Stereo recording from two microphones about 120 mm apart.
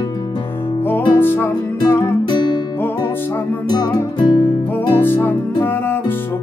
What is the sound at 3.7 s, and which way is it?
Music, 35° left (ahead or behind).